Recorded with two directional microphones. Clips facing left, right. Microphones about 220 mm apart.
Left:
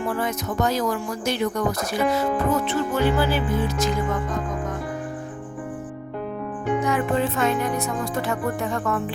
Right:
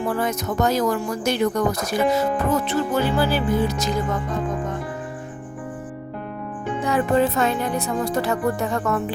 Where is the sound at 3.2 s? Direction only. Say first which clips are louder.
Right 2 dB; 35° right (ahead or behind).